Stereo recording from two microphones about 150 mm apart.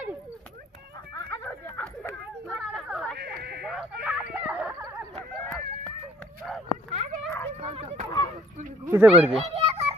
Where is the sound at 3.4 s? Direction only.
90° right.